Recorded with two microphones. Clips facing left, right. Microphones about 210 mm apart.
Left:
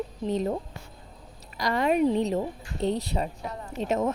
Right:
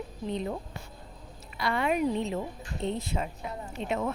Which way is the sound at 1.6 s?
40° left (ahead or behind).